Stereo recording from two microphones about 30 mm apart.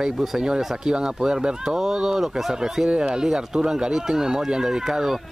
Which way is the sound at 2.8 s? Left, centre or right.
Right.